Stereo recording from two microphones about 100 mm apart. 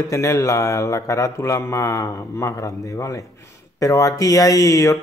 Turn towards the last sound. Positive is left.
turn(degrees=30)  # may be behind; listen again after turning